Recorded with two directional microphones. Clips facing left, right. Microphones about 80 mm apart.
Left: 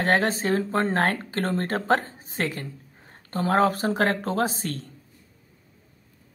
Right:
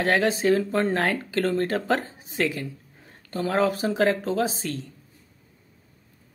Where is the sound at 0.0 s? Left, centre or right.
Left.